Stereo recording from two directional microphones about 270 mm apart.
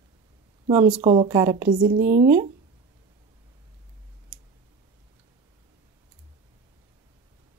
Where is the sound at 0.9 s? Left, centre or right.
Right.